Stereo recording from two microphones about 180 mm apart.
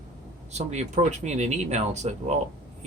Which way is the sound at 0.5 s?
40° right (ahead or behind).